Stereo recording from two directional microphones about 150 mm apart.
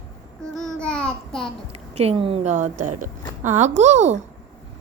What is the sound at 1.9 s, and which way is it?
A woman's voice, 45° right (ahead or behind).